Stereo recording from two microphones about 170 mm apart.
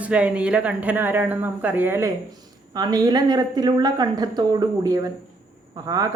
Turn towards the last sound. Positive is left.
turn(degrees=-20)  # may be behind; listen again after turning